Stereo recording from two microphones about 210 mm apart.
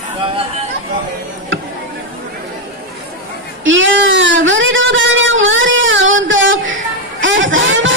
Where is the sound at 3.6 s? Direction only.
65° right (ahead or behind).